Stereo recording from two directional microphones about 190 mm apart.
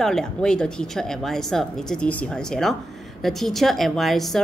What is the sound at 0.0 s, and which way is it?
A woman's voice, 5° left (ahead or behind).